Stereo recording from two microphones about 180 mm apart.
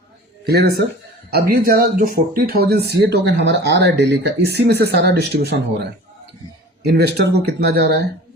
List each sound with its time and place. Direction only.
0.4 s speech: 60° right (ahead or behind)
6.8 s speech: 65° right (ahead or behind)